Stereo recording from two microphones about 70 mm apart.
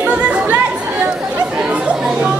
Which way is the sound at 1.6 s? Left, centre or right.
Centre.